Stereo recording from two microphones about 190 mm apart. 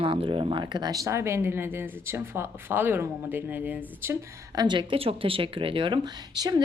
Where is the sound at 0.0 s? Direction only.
30° right (ahead or behind).